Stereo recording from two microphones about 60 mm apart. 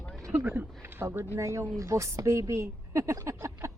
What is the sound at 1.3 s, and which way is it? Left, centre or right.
Speech, right.